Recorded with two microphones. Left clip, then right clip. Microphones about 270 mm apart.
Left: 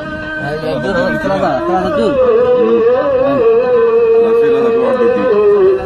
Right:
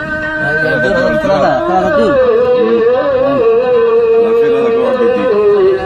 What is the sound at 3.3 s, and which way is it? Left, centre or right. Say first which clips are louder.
Music: even; right.